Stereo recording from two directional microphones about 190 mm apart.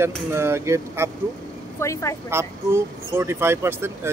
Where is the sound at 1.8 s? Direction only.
15° left (ahead or behind).